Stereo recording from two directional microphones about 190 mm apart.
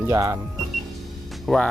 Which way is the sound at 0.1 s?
15° right (ahead or behind).